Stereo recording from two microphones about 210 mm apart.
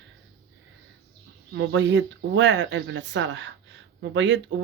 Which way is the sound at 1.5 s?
60° right (ahead or behind).